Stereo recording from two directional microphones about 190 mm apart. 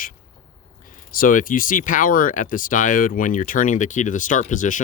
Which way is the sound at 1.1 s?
45° left (ahead or behind).